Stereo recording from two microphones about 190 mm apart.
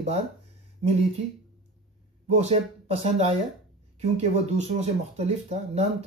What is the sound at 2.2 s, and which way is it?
Speech, 35° right (ahead or behind).